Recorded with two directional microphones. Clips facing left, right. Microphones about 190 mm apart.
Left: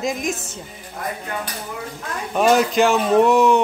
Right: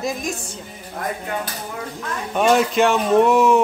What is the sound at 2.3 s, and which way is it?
Speech, centre (ahead or behind).